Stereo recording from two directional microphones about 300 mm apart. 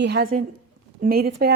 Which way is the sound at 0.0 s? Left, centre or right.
Right.